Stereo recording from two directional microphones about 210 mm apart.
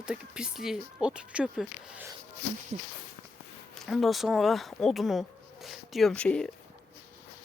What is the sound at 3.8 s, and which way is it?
Speech, centre (ahead or behind).